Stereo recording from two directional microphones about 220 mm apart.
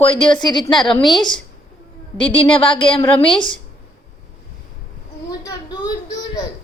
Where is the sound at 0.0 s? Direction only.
25° left (ahead or behind).